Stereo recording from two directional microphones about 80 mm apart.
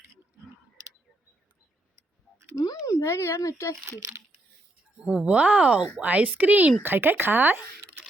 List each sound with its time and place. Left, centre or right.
2.8 s speech: left
5.0 s speech: centre